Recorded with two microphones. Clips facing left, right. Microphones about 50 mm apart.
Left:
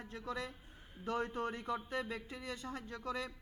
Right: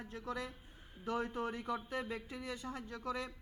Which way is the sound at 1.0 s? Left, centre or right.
Centre.